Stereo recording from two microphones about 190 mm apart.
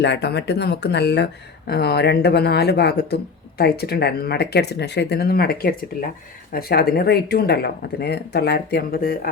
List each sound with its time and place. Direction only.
0.0 s speech: 60° left (ahead or behind)